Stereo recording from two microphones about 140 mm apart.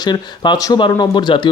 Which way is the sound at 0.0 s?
30° left (ahead or behind).